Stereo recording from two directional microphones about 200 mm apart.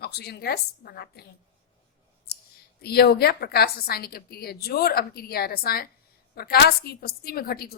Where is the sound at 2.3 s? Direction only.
55° left (ahead or behind).